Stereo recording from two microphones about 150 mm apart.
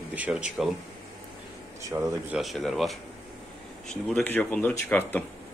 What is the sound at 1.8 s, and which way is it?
Speech, 20° right (ahead or behind).